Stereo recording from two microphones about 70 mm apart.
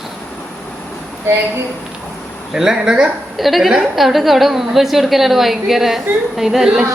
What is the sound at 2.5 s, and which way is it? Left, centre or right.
A woman's voice, centre.